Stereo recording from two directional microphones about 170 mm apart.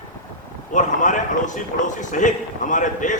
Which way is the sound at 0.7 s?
50° left (ahead or behind).